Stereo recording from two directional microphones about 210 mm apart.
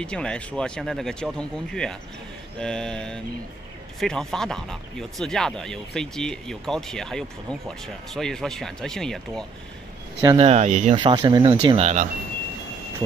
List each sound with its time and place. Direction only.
0.0 s speech: 5° left (ahead or behind)
10.3 s speech: 30° right (ahead or behind)
11.0 s speech: 20° right (ahead or behind)